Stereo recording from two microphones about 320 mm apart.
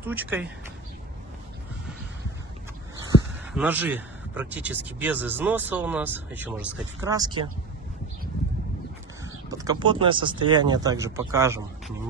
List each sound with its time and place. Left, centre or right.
0.0 s speech: centre
3.5 s speech: centre
9.2 s speech: centre